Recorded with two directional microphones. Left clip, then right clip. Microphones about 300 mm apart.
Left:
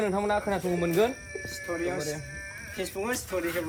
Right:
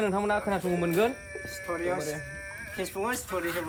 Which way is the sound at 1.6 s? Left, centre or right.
Right.